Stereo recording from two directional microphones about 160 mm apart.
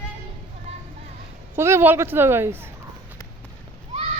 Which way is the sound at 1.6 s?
15° right (ahead or behind).